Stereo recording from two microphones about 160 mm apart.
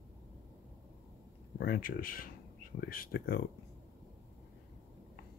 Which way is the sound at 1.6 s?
65° left (ahead or behind).